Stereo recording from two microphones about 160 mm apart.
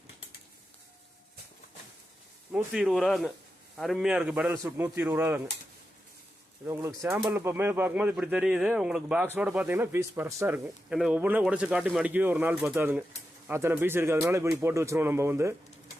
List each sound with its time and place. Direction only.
2.5 s speech: 5° right (ahead or behind)
6.7 s speech: 15° right (ahead or behind)